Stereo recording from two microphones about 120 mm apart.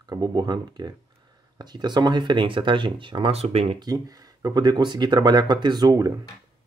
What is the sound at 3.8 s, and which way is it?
Speech, 30° right (ahead or behind).